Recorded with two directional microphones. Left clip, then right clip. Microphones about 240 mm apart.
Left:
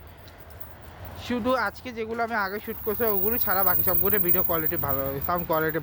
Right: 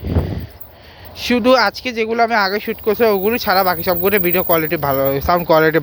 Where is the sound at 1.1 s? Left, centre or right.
Right.